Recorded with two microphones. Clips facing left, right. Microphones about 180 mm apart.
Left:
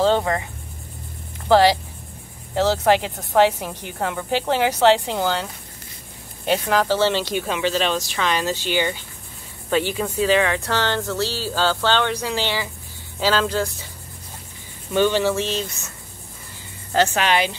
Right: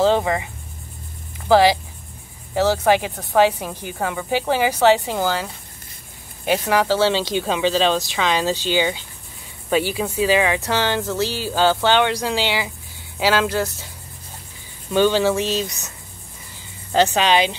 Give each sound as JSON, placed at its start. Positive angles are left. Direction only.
{"t": 0.0, "sound": "cricket", "side_deg": -5}
{"t": 1.5, "sound": "a woman's voice", "side_deg": 0}
{"t": 7.3, "sound": "speech", "side_deg": -25}
{"t": 15.2, "sound": "speech", "side_deg": -15}
{"t": 16.9, "sound": "speech", "side_deg": -20}